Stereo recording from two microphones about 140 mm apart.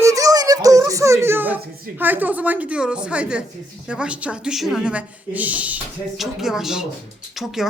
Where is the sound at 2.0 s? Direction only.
15° right (ahead or behind).